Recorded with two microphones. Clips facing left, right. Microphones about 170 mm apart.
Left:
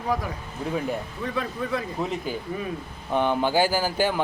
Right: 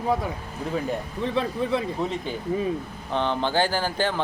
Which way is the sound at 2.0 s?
5° left (ahead or behind).